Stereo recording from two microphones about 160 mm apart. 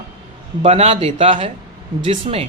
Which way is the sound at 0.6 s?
40° right (ahead or behind).